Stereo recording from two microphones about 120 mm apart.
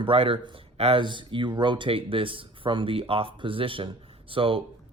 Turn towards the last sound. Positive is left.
turn(degrees=-50)  # may be behind; listen again after turning